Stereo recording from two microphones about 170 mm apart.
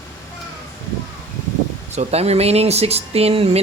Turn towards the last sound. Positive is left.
turn(degrees=-35)  # may be behind; listen again after turning